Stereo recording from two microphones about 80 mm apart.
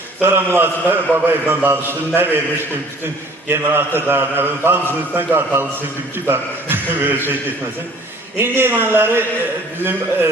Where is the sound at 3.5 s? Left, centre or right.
Right.